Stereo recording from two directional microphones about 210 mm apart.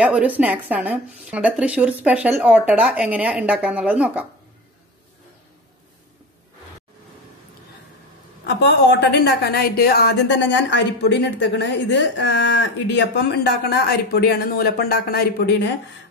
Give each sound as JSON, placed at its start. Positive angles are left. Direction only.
{"t": 0.0, "sound": "a woman's voice", "side_deg": -5}
{"t": 8.5, "sound": "a woman's voice", "side_deg": 50}